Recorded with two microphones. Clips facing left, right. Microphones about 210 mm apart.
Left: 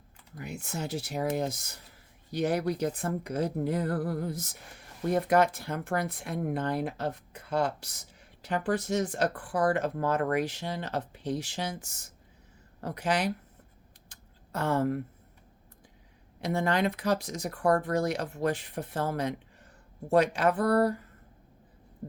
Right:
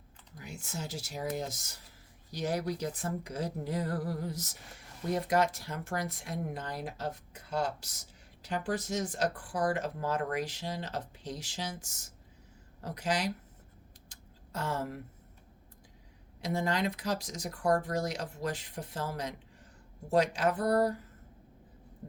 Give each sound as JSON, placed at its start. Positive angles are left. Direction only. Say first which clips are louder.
{"t": 0.3, "sound": "speech", "louder": "left 5 dB", "side_deg": 60}
{"t": 14.1, "sound": "a sound", "louder": "left 5 dB", "side_deg": 60}
{"t": 16.4, "sound": "speech", "louder": "left 4 dB", "side_deg": 60}